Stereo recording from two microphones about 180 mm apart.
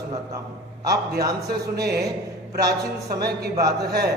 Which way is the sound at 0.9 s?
60° right (ahead or behind).